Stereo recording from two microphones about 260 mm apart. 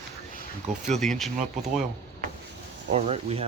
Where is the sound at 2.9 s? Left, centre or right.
Right.